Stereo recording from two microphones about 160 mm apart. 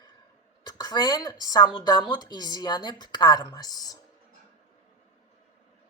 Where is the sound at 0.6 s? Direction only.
25° left (ahead or behind).